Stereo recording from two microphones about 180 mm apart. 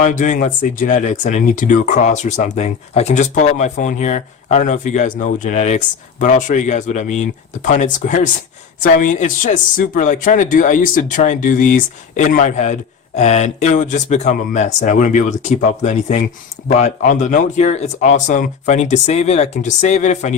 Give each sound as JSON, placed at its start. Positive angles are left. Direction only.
{"t": 0.0, "sound": "speech", "side_deg": 45}